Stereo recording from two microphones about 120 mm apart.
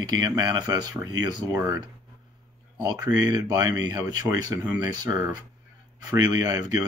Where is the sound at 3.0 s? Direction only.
35° right (ahead or behind).